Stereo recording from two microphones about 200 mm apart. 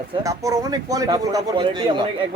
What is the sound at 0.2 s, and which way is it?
A man's voice, 15° right (ahead or behind).